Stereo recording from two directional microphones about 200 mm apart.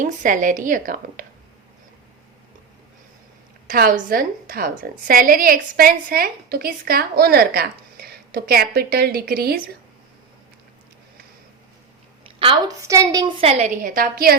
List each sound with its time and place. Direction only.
0.0 s a woman's voice: 40° right (ahead or behind)
3.7 s a woman's voice: 45° right (ahead or behind)
12.4 s a woman's voice: 25° right (ahead or behind)
12.8 s a woman's voice: 15° right (ahead or behind); by 14.3 s 45° right (ahead or behind)